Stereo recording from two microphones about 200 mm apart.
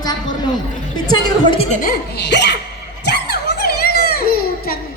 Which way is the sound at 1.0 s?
20° left (ahead or behind).